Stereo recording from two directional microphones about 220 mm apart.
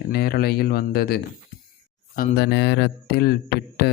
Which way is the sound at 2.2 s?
50° left (ahead or behind).